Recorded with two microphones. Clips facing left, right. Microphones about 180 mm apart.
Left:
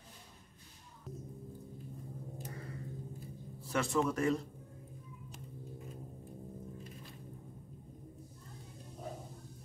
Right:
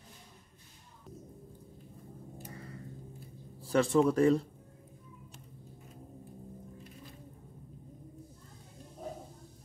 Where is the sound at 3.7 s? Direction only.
30° right (ahead or behind).